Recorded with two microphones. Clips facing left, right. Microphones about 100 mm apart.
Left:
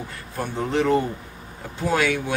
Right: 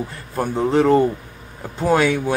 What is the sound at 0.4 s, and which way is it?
Speech, 35° right (ahead or behind).